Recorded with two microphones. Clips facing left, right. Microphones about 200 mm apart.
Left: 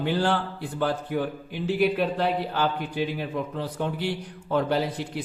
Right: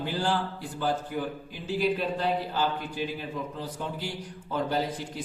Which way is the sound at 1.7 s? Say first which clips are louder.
Left 4 dB; 65° left (ahead or behind).